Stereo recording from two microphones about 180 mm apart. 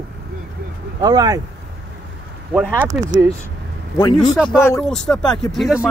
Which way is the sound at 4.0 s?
20° left (ahead or behind).